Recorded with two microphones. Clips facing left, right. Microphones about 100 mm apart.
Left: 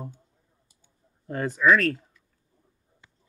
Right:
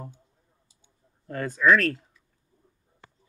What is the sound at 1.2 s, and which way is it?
Speech, 20° left (ahead or behind).